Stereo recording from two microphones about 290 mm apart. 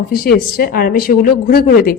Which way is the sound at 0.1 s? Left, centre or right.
Left.